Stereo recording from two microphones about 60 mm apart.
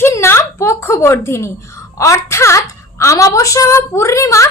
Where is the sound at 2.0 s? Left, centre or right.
Left.